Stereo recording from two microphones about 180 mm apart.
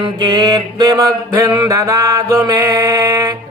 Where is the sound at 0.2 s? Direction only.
20° right (ahead or behind).